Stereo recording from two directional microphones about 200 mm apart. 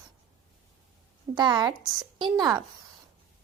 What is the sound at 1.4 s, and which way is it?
A woman's voice, 20° right (ahead or behind).